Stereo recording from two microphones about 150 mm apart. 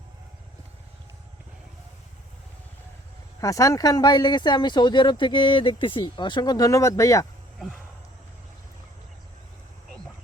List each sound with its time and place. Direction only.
3.4 s speech: 20° left (ahead or behind)